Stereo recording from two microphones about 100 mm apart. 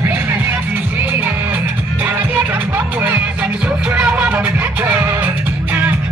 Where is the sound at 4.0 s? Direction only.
10° right (ahead or behind).